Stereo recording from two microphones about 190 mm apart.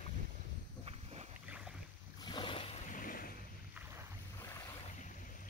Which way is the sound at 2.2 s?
25° left (ahead or behind).